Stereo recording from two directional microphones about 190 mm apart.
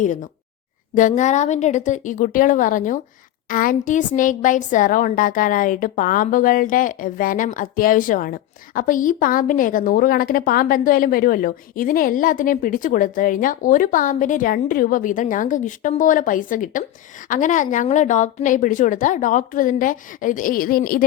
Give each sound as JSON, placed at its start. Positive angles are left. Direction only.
{"t": 0.0, "sound": "a woman's voice", "side_deg": 40}